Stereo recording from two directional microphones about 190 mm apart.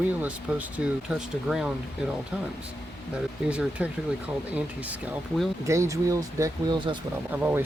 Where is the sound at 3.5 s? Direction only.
5° right (ahead or behind).